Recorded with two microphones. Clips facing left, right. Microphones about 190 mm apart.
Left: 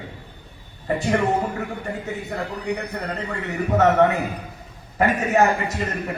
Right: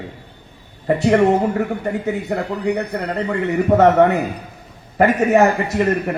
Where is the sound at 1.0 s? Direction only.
65° right (ahead or behind).